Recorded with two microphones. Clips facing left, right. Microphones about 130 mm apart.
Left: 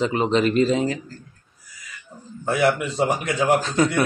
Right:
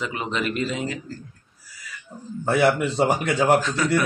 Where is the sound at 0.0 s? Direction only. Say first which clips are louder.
Left 7 dB; 30° left (ahead or behind).